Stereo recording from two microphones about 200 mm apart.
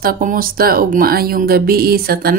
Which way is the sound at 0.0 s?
45° right (ahead or behind).